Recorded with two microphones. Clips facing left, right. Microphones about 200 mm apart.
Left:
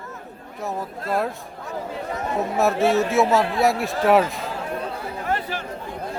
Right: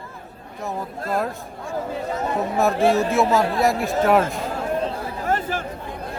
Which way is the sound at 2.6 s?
Centre (ahead or behind).